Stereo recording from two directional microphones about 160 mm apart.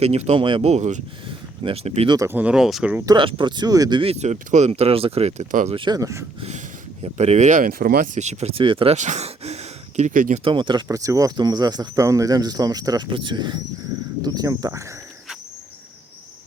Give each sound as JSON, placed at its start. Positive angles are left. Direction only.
{"t": 0.0, "sound": "speech", "side_deg": -40}
{"t": 1.3, "sound": "a sound", "side_deg": -35}
{"t": 2.0, "sound": "speech", "side_deg": -20}
{"t": 3.1, "sound": "speech", "side_deg": -30}
{"t": 5.7, "sound": "speech", "side_deg": -30}
{"t": 6.4, "sound": "speech", "side_deg": -45}
{"t": 10.4, "sound": "speech", "side_deg": -30}